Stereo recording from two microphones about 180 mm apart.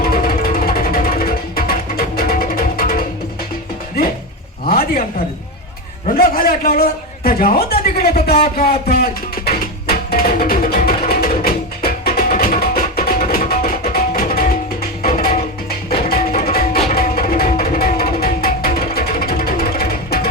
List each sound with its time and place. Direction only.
0.0 s music: 55° left (ahead or behind)
4.7 s a sound: 55° left (ahead or behind)
6.1 s a man's voice: 55° left (ahead or behind)
9.9 s music: 55° left (ahead or behind)